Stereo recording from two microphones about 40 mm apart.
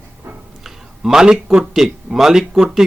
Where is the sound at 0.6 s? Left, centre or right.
Centre.